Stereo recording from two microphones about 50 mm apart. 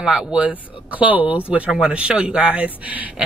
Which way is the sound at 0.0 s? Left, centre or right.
Centre.